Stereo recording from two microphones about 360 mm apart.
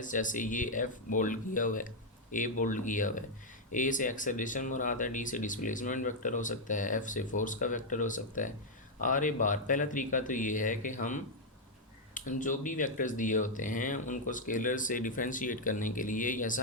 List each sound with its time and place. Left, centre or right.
0.0 s speech: left